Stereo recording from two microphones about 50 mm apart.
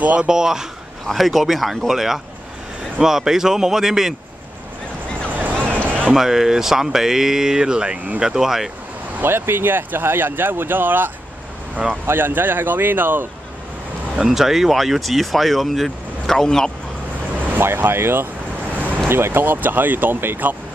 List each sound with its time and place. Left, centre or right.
0.0 s speech: right
1.0 s speech: centre
5.3 s music: right
6.1 s speech: centre
9.2 s speech: right
12.1 s speech: right
14.3 s speech: centre
17.6 s speech: right